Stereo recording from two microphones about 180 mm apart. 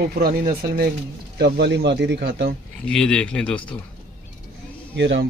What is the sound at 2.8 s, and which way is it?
Speech, 5° left (ahead or behind).